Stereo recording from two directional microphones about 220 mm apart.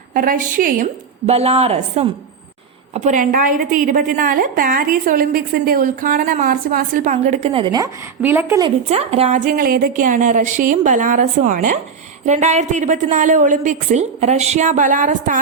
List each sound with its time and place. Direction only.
0.1 s a woman's voice: 40° right (ahead or behind); by 8.7 s 15° right (ahead or behind)
8.9 s a woman's voice: 30° right (ahead or behind)